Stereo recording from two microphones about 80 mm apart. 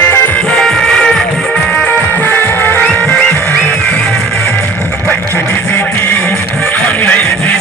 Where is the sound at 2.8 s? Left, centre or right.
Centre.